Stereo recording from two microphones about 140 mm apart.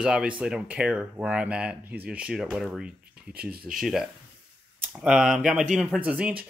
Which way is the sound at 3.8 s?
Centre (ahead or behind).